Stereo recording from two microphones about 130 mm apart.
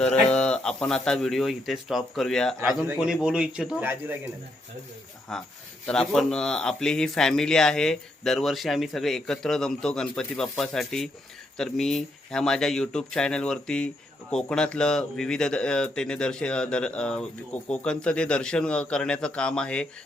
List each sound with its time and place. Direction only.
0.0 s speech: 5° left (ahead or behind)
2.8 s a man's voice: 15° right (ahead or behind)
5.3 s speech: 5° left (ahead or behind)